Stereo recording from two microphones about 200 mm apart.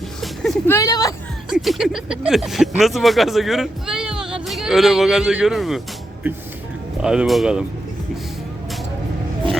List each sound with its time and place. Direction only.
0.2 s a sound: centre (ahead or behind)
0.7 s speech: 20° left (ahead or behind)
1.5 s speech: centre (ahead or behind)
7.0 s speech: 5° right (ahead or behind)